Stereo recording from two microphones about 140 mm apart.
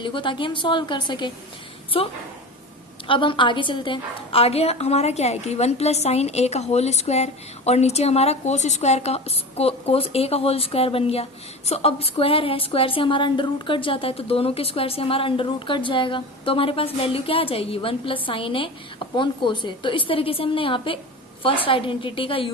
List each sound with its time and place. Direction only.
0.0 s a woman's voice: 35° left (ahead or behind)